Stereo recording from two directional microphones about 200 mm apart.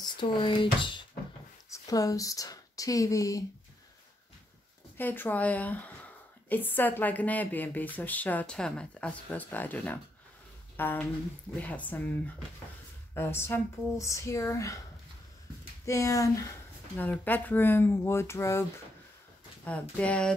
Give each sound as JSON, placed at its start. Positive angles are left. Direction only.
{"t": 0.0, "sound": "speech", "side_deg": 25}
{"t": 4.9, "sound": "a woman's voice", "side_deg": 10}
{"t": 15.8, "sound": "a woman's voice", "side_deg": 15}
{"t": 19.6, "sound": "speech", "side_deg": 5}